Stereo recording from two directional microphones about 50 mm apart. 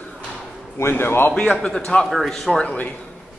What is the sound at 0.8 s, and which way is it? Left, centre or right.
Speech, left.